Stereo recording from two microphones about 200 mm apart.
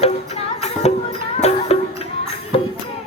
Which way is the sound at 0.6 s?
30° left (ahead or behind).